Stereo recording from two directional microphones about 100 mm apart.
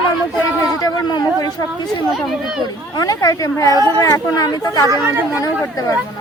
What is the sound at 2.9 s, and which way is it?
Speech, 35° left (ahead or behind).